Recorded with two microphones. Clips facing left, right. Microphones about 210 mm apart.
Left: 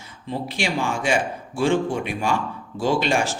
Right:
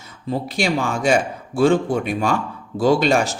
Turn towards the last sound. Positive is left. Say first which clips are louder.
# right 5 dB
turn(degrees=-40)  # may be behind; listen again after turning